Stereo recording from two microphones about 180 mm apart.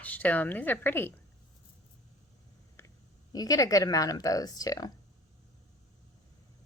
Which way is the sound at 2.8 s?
15° left (ahead or behind).